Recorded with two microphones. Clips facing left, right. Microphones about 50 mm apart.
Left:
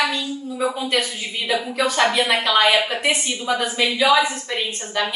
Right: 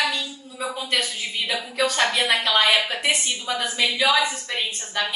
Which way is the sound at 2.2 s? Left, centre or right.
Left.